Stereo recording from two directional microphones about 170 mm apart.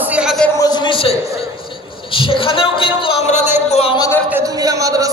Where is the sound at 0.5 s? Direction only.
25° left (ahead or behind).